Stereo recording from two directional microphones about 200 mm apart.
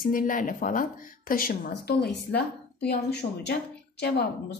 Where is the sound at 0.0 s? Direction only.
45° left (ahead or behind).